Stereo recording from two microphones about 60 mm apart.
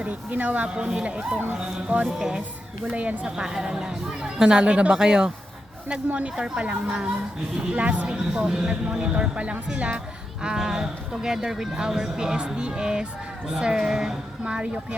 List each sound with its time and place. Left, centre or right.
0.0 s speech: right
2.1 s speech: centre
2.9 s speech: right
3.2 s speech: centre